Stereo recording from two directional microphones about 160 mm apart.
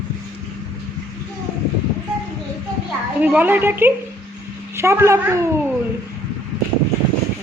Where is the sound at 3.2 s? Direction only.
10° right (ahead or behind).